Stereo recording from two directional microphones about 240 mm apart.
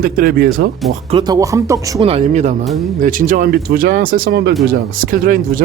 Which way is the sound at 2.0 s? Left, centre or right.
Right.